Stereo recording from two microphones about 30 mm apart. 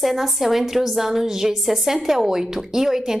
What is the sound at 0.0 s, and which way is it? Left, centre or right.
A woman's voice, centre.